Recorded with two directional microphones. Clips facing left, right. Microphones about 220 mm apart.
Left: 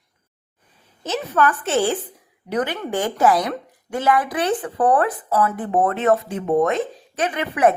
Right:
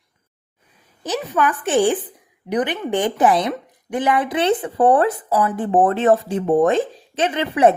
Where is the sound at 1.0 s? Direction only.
15° right (ahead or behind).